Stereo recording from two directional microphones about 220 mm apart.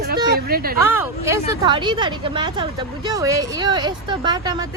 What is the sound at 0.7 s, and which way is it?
Speech, 10° right (ahead or behind).